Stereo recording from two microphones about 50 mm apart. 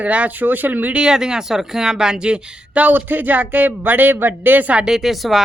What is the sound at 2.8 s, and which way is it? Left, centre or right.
Speech, right.